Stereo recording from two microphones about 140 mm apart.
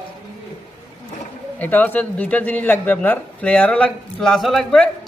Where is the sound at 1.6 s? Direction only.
10° left (ahead or behind).